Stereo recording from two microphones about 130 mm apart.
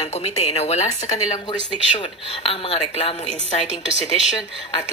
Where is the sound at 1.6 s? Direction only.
45° left (ahead or behind).